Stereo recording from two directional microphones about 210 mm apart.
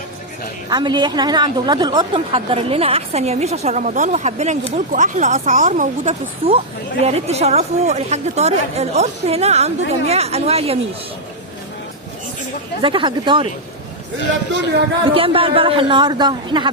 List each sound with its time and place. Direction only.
0.7 s a woman's voice: 20° right (ahead or behind)
12.8 s a woman's voice: 25° right (ahead or behind)
15.1 s a woman's voice: 25° right (ahead or behind)